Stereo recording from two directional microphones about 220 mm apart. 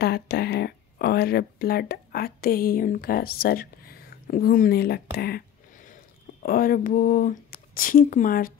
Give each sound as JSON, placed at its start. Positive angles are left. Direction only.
{"t": 0.0, "sound": "speech", "side_deg": 50}
{"t": 6.4, "sound": "speech", "side_deg": 40}